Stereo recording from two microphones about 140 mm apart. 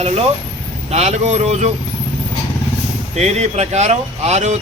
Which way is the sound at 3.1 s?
50° right (ahead or behind).